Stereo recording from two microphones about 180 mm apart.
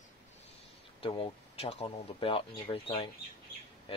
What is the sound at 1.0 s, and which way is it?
Speech, 30° left (ahead or behind).